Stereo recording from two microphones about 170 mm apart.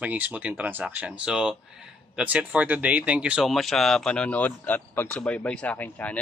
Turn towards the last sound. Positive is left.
turn(degrees=10)  # may be behind; listen again after turning